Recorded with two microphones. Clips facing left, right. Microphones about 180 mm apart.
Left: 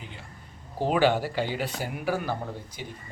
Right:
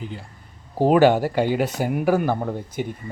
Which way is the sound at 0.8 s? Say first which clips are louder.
Right 8 dB; 45° right (ahead or behind).